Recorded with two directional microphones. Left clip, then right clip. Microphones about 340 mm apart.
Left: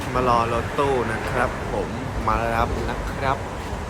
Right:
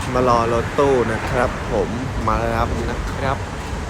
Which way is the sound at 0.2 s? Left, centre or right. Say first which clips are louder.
Right 3 dB; centre.